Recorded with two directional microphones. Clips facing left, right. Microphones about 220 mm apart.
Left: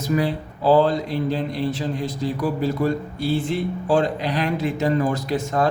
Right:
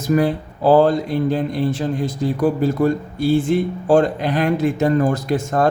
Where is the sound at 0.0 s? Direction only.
45° right (ahead or behind).